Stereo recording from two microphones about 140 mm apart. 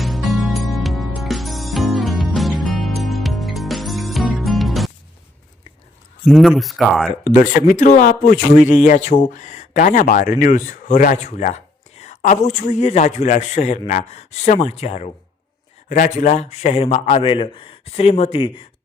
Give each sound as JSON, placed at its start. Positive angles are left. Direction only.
{"t": 0.0, "sound": "music", "side_deg": 0}
{"t": 6.2, "sound": "speech", "side_deg": 0}
{"t": 7.3, "sound": "a man's voice", "side_deg": 80}
{"t": 15.9, "sound": "speech", "side_deg": 70}
{"t": 16.5, "sound": "a man's voice", "side_deg": 50}
{"t": 17.2, "sound": "speech", "side_deg": 40}